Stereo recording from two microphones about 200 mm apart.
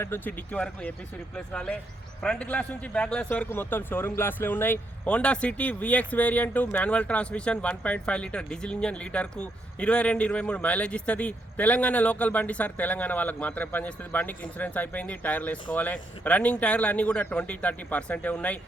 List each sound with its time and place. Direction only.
0.0 s a man's voice: 10° left (ahead or behind)